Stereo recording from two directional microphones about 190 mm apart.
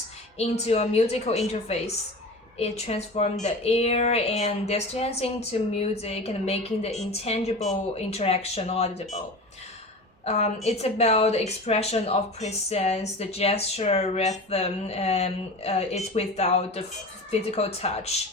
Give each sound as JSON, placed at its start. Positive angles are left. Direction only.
{"t": 0.3, "sound": "a woman's voice", "side_deg": 35}
{"t": 10.2, "sound": "a woman's voice", "side_deg": 35}